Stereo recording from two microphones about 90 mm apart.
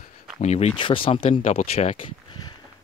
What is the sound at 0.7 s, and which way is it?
Speech, 70° left (ahead or behind).